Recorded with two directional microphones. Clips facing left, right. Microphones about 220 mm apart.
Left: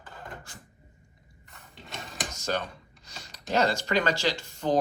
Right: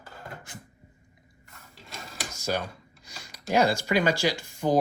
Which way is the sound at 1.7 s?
Centre (ahead or behind).